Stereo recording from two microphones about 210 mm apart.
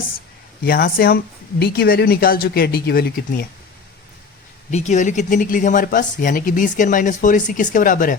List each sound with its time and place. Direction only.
0.6 s speech: 45° left (ahead or behind)
4.7 s speech: 35° left (ahead or behind)